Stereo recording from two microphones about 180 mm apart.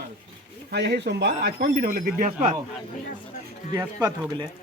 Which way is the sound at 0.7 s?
70° right (ahead or behind).